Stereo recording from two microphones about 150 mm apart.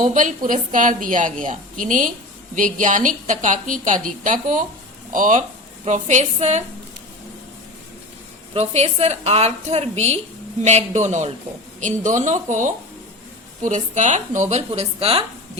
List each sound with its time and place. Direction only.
0.0 s a woman's voice: 55° right (ahead or behind)
8.5 s a woman's voice: 45° right (ahead or behind)
14.5 s speech: 45° right (ahead or behind)